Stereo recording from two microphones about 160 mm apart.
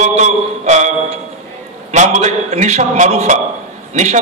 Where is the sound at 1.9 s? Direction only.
50° right (ahead or behind).